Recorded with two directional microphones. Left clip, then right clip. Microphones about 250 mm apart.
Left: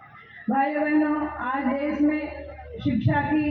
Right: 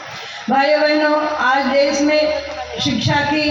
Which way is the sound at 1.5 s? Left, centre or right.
Right.